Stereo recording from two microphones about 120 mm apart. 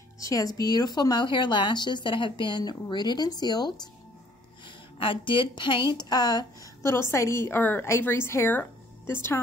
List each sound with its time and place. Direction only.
0.2 s speech: 30° left (ahead or behind)
4.9 s speech: 45° left (ahead or behind)
6.8 s a woman's voice: 20° left (ahead or behind)